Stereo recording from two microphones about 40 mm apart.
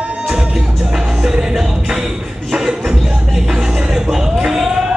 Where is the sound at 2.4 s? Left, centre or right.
Centre.